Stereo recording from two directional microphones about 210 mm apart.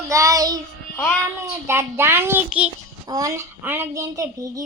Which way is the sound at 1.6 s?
10° right (ahead or behind).